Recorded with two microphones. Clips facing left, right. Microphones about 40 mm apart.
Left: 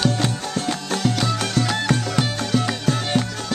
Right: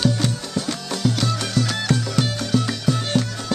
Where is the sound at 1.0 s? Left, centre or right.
Centre.